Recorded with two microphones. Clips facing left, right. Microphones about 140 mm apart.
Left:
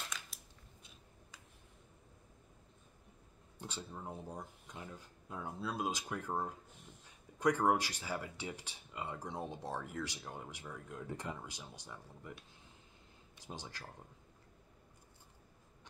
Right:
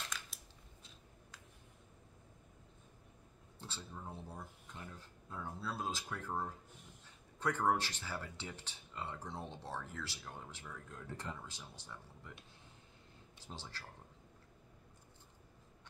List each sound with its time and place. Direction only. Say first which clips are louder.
0.3 s scissors: even; centre (ahead or behind)
3.5 s speech: left 3 dB; 15° left (ahead or behind)
13.4 s speech: left 3 dB; 15° left (ahead or behind)